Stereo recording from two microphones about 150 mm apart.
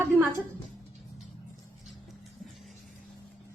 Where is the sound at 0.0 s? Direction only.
15° right (ahead or behind).